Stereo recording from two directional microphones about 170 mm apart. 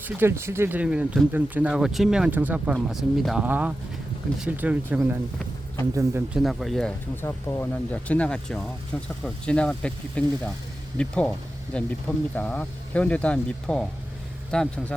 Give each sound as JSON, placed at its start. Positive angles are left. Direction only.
{"t": 0.0, "sound": "speech", "side_deg": -15}
{"t": 6.3, "sound": "speech", "side_deg": 0}
{"t": 7.2, "sound": "speech", "side_deg": 15}